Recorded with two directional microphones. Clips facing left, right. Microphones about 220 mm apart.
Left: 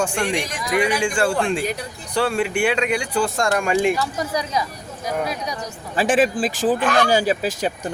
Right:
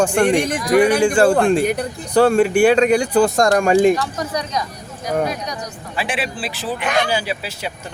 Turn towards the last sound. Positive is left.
turn(degrees=45)  # may be behind; listen again after turning